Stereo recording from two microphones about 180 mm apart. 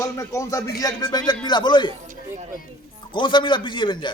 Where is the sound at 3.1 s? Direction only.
25° left (ahead or behind).